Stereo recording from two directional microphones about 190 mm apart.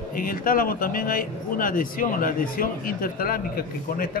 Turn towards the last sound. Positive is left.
turn(degrees=50)  # may be behind; listen again after turning